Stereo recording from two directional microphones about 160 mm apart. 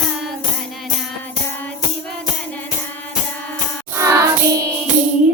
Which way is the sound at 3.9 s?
15° right (ahead or behind).